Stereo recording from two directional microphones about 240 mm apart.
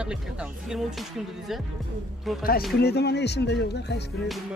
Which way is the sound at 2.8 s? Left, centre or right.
Left.